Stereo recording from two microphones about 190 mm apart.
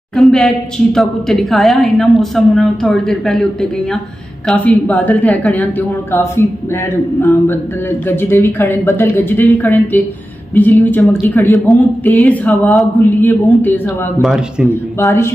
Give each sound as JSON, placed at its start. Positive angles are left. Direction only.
{"t": 0.1, "sound": "a woman's voice", "side_deg": 0}
{"t": 4.5, "sound": "a woman's voice", "side_deg": 5}
{"t": 8.1, "sound": "a woman's voice", "side_deg": 10}
{"t": 14.2, "sound": "a woman's voice", "side_deg": 0}
{"t": 15.0, "sound": "a woman's voice", "side_deg": 15}